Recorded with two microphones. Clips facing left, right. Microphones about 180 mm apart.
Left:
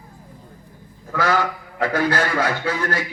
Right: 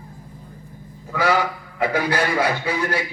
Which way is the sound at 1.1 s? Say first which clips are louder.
Even; 10° right (ahead or behind).